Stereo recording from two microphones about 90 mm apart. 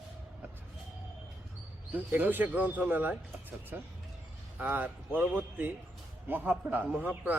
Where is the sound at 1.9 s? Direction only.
15° right (ahead or behind).